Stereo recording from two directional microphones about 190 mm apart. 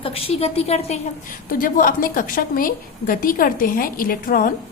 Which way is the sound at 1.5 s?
45° left (ahead or behind).